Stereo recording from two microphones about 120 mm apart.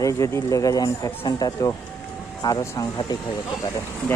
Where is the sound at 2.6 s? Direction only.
25° left (ahead or behind).